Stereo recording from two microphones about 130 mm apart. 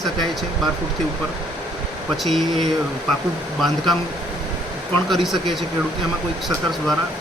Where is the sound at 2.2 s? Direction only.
Centre (ahead or behind).